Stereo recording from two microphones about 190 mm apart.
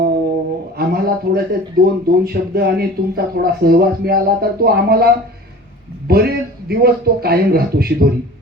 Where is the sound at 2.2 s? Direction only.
55° right (ahead or behind).